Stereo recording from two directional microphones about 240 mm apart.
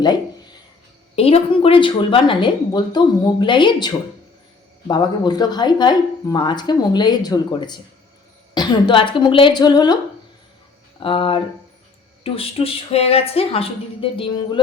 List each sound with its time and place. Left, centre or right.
1.1 s a woman's voice: left
11.0 s speech: left